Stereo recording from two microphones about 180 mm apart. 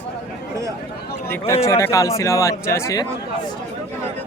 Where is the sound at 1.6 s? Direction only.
15° left (ahead or behind).